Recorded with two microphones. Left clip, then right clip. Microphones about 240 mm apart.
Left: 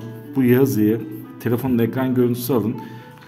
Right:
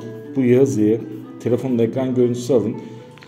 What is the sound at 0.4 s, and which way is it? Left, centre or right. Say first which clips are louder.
A man's voice: right 1 dB; left.